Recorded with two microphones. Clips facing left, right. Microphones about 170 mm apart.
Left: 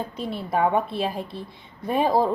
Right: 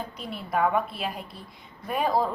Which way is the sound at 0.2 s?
30° left (ahead or behind).